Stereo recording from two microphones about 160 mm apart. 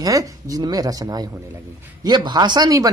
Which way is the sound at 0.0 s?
20° right (ahead or behind).